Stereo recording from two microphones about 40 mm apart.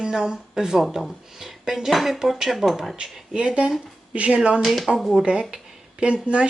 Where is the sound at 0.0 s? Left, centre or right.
Centre.